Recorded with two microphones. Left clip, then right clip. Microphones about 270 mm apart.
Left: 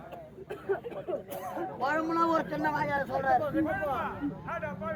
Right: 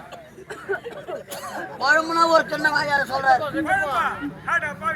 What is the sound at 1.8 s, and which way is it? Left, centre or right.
A man's voice, centre.